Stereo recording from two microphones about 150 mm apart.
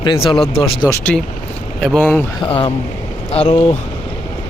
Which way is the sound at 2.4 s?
40° left (ahead or behind).